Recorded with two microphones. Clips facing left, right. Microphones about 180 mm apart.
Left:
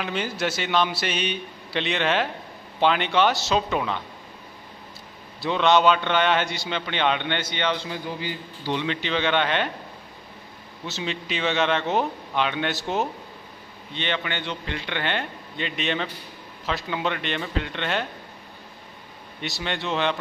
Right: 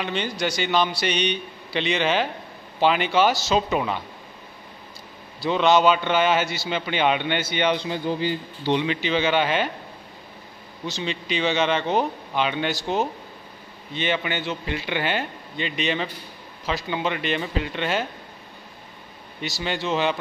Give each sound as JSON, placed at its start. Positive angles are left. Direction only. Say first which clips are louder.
{"t": 0.0, "sound": "a man's voice", "louder": "right 1 dB", "side_deg": 5}
{"t": 5.4, "sound": "a man's voice", "louder": "right 1 dB", "side_deg": 0}
{"t": 7.9, "sound": "a man's voice", "louder": "right 6 dB", "side_deg": -25}
{"t": 8.8, "sound": "a man's voice", "louder": "right 2 dB", "side_deg": -5}
{"t": 10.9, "sound": "a man's voice", "louder": "right 2 dB", "side_deg": 0}
{"t": 19.4, "sound": "a man's voice", "louder": "right 2 dB", "side_deg": 0}